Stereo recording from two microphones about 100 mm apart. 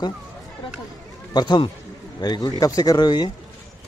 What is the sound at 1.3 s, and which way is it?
Speech, 45° left (ahead or behind).